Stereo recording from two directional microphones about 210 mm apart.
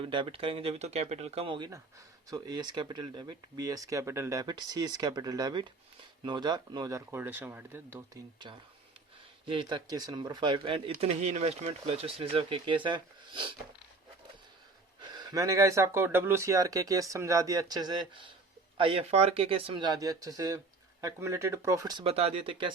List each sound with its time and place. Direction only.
0.0 s speech: 25° right (ahead or behind)
8.4 s speech: 20° right (ahead or behind)
15.0 s speech: 20° right (ahead or behind)